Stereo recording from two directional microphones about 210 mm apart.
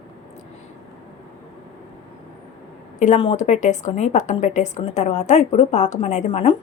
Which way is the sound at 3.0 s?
30° left (ahead or behind).